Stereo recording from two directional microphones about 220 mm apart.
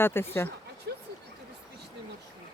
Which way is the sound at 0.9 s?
50° right (ahead or behind).